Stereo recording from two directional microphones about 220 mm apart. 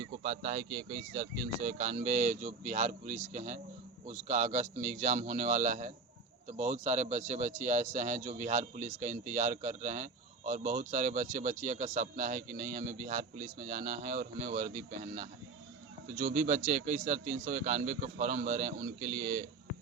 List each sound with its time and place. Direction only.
0.2 s speech: 30° right (ahead or behind)